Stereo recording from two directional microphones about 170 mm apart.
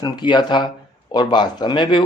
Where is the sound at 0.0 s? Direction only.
25° left (ahead or behind).